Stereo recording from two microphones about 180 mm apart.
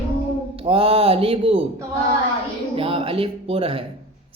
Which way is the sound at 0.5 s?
30° right (ahead or behind).